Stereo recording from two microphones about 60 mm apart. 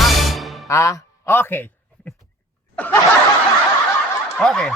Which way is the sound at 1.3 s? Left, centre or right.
Left.